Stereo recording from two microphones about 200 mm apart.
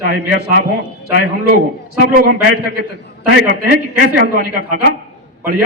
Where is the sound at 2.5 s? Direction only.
50° right (ahead or behind).